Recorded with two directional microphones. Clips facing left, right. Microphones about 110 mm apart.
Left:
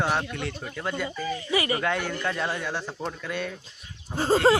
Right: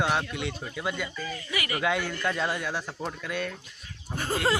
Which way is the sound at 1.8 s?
Centre (ahead or behind).